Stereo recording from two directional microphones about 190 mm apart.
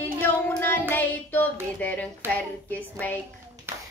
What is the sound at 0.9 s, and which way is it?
A woman's voice, 10° left (ahead or behind).